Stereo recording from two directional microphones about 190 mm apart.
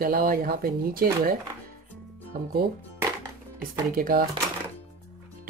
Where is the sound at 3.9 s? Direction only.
50° right (ahead or behind).